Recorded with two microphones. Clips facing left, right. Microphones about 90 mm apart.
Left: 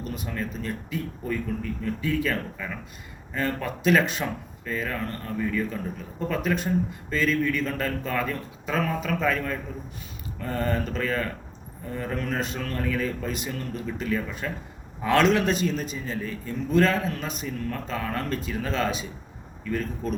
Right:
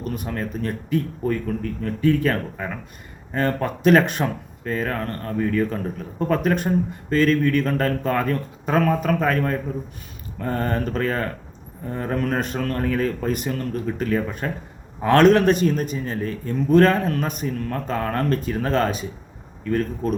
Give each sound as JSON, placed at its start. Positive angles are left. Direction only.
{"t": 0.0, "sound": "speech", "side_deg": -50}